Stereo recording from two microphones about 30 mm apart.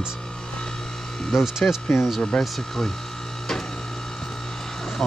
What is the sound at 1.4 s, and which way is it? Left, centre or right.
Speech, centre.